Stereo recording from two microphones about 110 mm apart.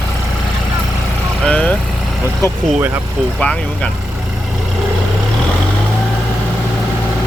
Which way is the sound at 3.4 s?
10° left (ahead or behind).